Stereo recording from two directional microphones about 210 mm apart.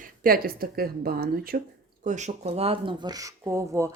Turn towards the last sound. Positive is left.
turn(degrees=-15)  # may be behind; listen again after turning